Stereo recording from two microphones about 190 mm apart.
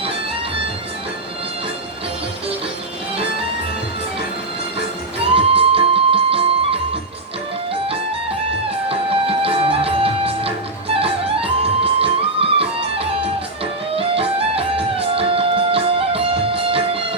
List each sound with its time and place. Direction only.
5.2 s music: 30° right (ahead or behind)
8.9 s music: 30° right (ahead or behind)